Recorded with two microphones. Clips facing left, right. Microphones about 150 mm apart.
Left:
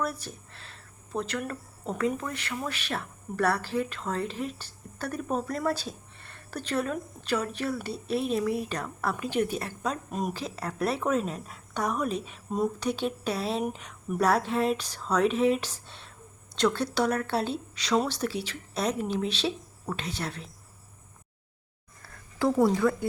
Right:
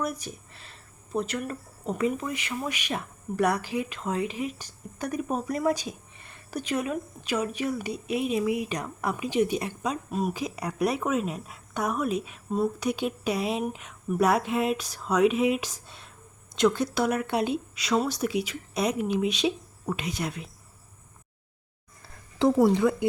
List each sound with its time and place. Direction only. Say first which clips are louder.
0.0 s speech: right 1 dB; 15° right (ahead or behind)
10.4 s speech: right 3 dB; 15° right (ahead or behind)
22.0 s a sound: right 4 dB; 20° right (ahead or behind)
22.7 s speech: right 2 dB; 20° right (ahead or behind)